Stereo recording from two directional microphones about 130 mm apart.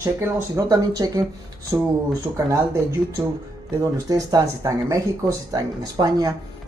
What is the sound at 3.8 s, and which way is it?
Speech, 30° right (ahead or behind).